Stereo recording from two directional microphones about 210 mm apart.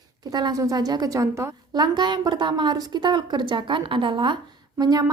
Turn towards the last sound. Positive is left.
turn(degrees=-20)  # may be behind; listen again after turning